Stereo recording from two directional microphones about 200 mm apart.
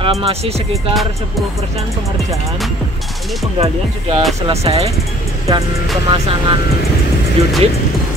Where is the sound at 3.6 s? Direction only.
30° right (ahead or behind).